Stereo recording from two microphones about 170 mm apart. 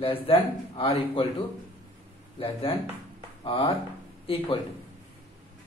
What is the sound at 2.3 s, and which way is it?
A man's voice, 30° left (ahead or behind).